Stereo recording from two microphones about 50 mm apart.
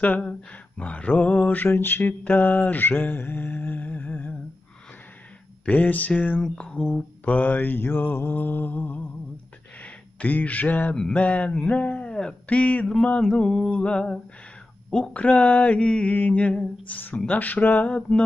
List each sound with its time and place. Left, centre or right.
0.2 s a sound: left
1.4 s mantra: left
5.7 s mantra: left
6.4 s mantra: left
9.8 s speech: left
11.0 s mantra: centre
11.2 s a sound: left
12.1 s speech: centre
12.4 s a sound: left
13.3 s mantra: centre
13.7 s a sound: left
17.3 s mantra: left